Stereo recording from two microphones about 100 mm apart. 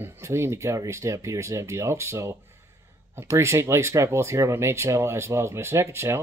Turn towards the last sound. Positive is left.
turn(degrees=-25)  # may be behind; listen again after turning